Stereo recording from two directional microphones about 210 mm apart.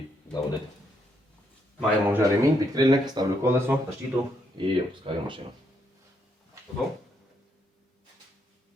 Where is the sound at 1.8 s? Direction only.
10° right (ahead or behind).